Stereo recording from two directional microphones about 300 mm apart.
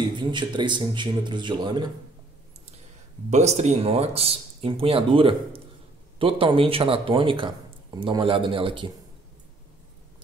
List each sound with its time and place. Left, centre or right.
0.0 s speech: centre
3.3 s speech: right